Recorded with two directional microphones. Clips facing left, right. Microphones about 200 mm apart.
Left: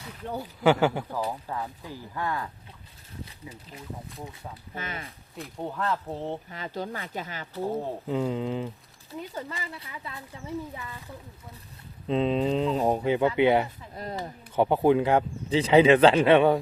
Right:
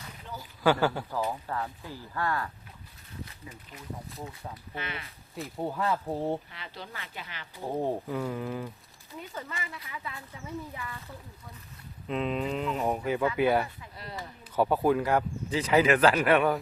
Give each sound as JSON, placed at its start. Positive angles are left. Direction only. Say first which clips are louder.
{"t": 0.2, "sound": "speech", "louder": "left 9 dB", "side_deg": 55}
{"t": 0.6, "sound": "speech", "louder": "left 3 dB", "side_deg": 20}
{"t": 3.4, "sound": "speech", "louder": "left 3 dB", "side_deg": 25}
{"t": 4.1, "sound": "speech", "louder": "even", "side_deg": 0}
{"t": 4.7, "sound": "speech", "louder": "left 2 dB", "side_deg": 45}
{"t": 5.4, "sound": "speech", "louder": "right 1 dB", "side_deg": -5}
{"t": 6.5, "sound": "speech", "louder": "left 10 dB", "side_deg": 45}
{"t": 8.0, "sound": "speech", "louder": "left 5 dB", "side_deg": 20}
{"t": 9.3, "sound": "speech", "louder": "left 3 dB", "side_deg": 35}
{"t": 12.0, "sound": "speech", "louder": "left 6 dB", "side_deg": 30}
{"t": 13.9, "sound": "speech", "louder": "left 6 dB", "side_deg": 45}
{"t": 14.5, "sound": "speech", "louder": "left 3 dB", "side_deg": 25}